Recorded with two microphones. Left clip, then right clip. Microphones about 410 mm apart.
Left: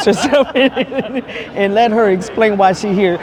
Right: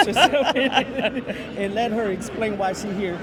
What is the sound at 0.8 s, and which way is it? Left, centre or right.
Speech, left.